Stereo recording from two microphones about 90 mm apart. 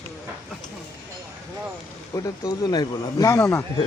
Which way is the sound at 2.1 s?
40° left (ahead or behind).